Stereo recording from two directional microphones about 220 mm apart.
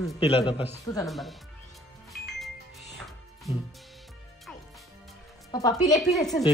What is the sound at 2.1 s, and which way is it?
Music, centre (ahead or behind).